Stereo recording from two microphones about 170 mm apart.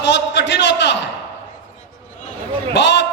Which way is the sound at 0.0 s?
90° left.